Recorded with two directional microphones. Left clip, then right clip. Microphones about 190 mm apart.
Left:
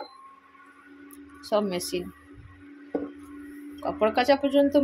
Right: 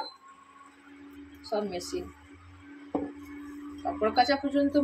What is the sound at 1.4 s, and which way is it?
Speech, 40° left (ahead or behind).